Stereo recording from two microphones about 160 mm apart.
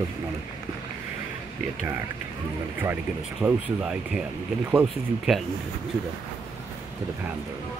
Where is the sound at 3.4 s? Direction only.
5° right (ahead or behind).